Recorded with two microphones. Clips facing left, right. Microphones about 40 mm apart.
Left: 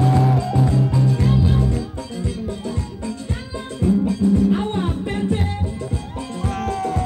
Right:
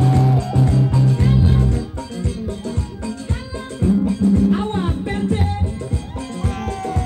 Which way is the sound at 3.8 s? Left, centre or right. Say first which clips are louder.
Right 1 dB; right.